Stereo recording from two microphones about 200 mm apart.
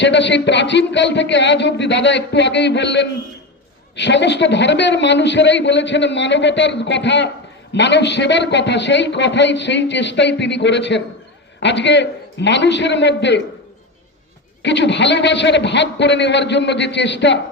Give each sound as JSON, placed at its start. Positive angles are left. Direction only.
{"t": 0.0, "sound": "a man's voice", "side_deg": 60}
{"t": 14.6, "sound": "a man's voice", "side_deg": 60}